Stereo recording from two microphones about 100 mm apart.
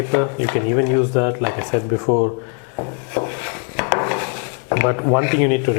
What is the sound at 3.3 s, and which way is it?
Dishes, 10° left (ahead or behind).